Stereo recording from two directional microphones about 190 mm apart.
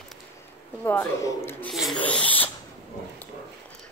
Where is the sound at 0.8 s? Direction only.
10° left (ahead or behind).